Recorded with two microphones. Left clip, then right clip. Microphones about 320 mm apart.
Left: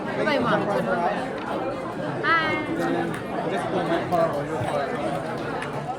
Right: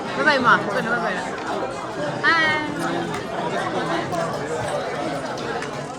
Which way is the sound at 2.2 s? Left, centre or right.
Centre.